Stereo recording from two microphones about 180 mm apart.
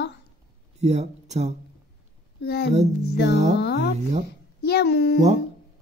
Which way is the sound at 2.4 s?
65° left (ahead or behind).